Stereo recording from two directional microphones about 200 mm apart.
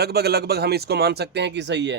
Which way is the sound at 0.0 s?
50° right (ahead or behind).